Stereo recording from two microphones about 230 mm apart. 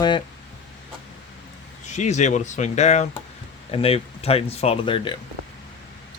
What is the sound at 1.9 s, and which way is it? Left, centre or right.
Speech, left.